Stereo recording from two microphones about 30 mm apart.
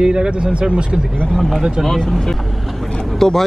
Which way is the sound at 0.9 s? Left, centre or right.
Centre.